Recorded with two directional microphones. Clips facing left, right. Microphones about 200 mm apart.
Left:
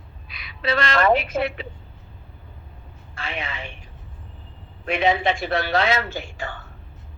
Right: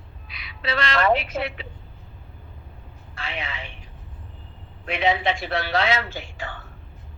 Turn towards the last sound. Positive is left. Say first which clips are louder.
# left 3 dB
turn(degrees=45)  # may be behind; listen again after turning